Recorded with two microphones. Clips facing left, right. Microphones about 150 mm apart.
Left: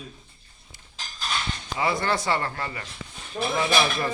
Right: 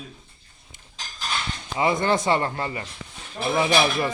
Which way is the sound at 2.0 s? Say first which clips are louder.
Right 4 dB; 20° right (ahead or behind).